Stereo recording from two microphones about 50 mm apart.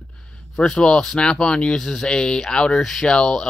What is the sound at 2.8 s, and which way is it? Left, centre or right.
Speech, centre.